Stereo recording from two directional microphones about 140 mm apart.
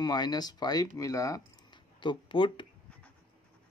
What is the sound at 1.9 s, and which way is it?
Speech, 35° left (ahead or behind).